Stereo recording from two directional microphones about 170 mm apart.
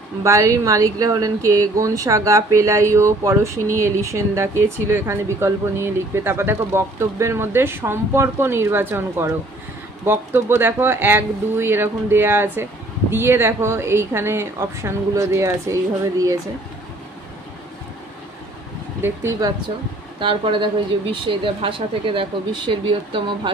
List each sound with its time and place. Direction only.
0.2 s speech: 15° right (ahead or behind)
19.0 s speech: 15° right (ahead or behind)